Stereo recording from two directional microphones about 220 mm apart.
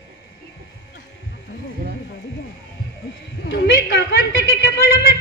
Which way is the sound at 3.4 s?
50° left (ahead or behind).